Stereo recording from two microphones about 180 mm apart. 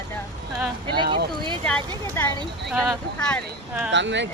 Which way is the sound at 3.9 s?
85° right.